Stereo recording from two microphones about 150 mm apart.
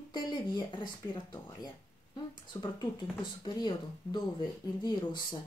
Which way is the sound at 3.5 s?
30° left (ahead or behind).